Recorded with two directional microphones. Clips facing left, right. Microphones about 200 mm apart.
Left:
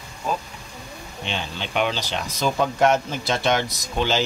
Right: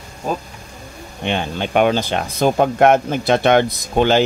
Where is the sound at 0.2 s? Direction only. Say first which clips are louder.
Right 3 dB; 45° right (ahead or behind).